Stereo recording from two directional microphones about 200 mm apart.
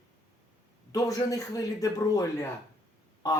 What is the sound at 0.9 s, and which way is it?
A man's voice, 15° left (ahead or behind).